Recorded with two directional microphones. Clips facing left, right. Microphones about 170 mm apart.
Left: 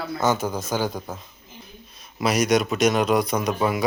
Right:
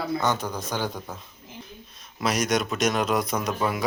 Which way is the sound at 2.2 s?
5° left (ahead or behind).